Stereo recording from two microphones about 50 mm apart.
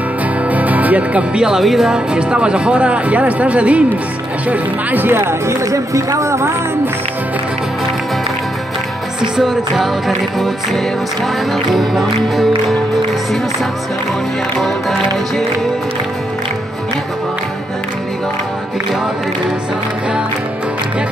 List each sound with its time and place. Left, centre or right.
0.5 s music: right
1.6 s music: centre
1.9 s speech: centre
4.5 s speech: right
5.2 s speech: right
9.2 s music: centre
14.6 s music: centre